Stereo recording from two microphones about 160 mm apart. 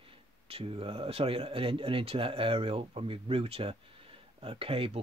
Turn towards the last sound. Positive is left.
turn(degrees=-35)  # may be behind; listen again after turning